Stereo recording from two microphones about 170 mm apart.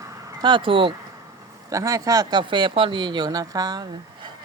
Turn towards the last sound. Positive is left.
turn(degrees=-25)  # may be behind; listen again after turning